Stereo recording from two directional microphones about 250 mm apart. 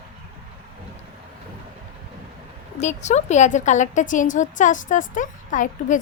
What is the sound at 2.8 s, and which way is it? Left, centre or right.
A woman's voice, left.